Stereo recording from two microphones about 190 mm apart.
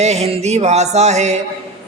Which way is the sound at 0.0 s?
35° right (ahead or behind).